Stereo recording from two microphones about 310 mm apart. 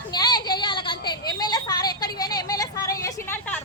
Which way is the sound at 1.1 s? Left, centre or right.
Centre.